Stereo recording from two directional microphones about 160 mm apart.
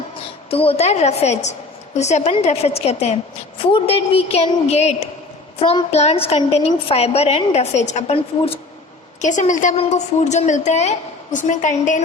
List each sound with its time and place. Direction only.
0.5 s a woman's voice: 35° left (ahead or behind)